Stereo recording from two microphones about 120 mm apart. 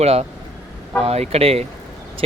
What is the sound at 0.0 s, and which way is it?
Speech, 60° right (ahead or behind).